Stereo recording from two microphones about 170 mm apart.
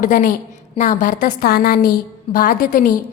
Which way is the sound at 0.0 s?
50° left (ahead or behind).